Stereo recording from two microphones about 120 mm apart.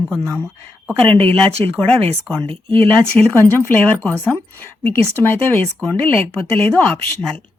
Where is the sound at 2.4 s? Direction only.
50° right (ahead or behind).